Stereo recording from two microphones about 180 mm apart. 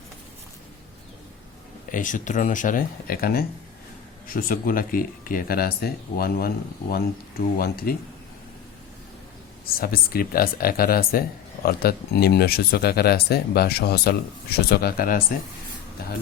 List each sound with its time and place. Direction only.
1.9 s speech: 45° left (ahead or behind)
7.6 s speech: 55° left (ahead or behind)
9.6 s speech: 55° left (ahead or behind)